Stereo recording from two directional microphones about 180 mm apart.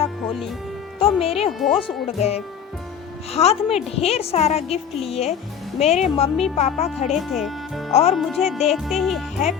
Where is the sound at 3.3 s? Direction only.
35° left (ahead or behind).